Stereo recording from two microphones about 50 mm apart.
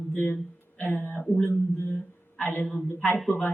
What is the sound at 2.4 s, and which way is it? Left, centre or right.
Speech, left.